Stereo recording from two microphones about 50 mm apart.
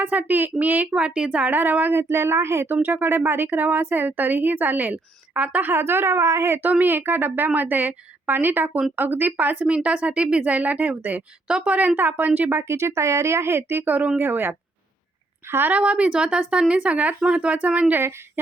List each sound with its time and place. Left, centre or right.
0.0 s speech: right
0.9 s a woman's voice: right
2.0 s speech: right
2.6 s speech: right
5.7 s speech: right
6.6 s speech: right
11.4 s speech: right
12.5 s speech: right
13.8 s speech: right
14.2 s speech: right
15.7 s a woman's voice: right